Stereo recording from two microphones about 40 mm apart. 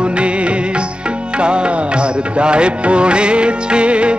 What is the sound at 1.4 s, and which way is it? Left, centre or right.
Music, right.